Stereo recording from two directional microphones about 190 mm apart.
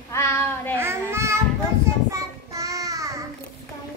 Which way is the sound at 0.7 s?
15° right (ahead or behind).